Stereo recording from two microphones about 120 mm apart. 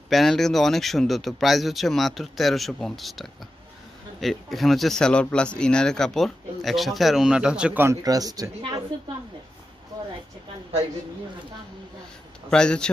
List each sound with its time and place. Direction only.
0.1 s speech: centre (ahead or behind)
7.8 s speech: 30° right (ahead or behind)
12.4 s speech: 5° left (ahead or behind)